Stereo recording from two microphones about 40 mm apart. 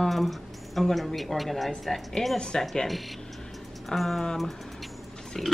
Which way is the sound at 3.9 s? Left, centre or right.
Centre.